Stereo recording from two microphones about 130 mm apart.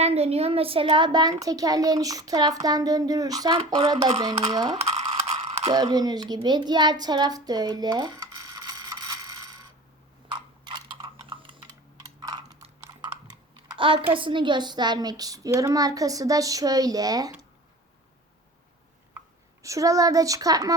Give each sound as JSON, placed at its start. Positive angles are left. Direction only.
{"t": 0.0, "sound": "a child's voice", "side_deg": -50}
{"t": 5.1, "sound": "a sound", "side_deg": -50}
{"t": 5.6, "sound": "a child's voice", "side_deg": -30}
{"t": 8.2, "sound": "mechanisms", "side_deg": -30}
{"t": 10.2, "sound": "a sound", "side_deg": -40}
{"t": 12.0, "sound": "computer keyboard", "side_deg": -30}
{"t": 13.5, "sound": "typing", "side_deg": -40}
{"t": 14.1, "sound": "a child's voice", "side_deg": -40}
{"t": 19.6, "sound": "a child's voice", "side_deg": -25}